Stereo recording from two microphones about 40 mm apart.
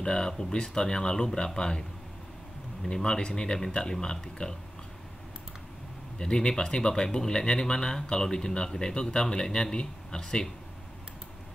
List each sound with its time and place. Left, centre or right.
0.0 s speech: centre
2.9 s speech: left
6.1 s speech: left